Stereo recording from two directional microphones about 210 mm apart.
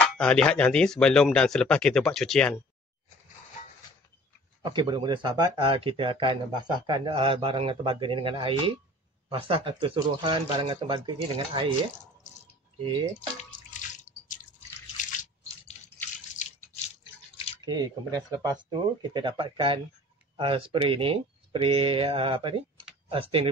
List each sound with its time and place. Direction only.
0.2 s speech: 5° left (ahead or behind)
4.6 s speech: 20° right (ahead or behind)
12.8 s speech: 25° right (ahead or behind)
14.0 s drip: 40° left (ahead or behind)
17.0 s drip: 25° left (ahead or behind)
17.6 s speech: 20° right (ahead or behind)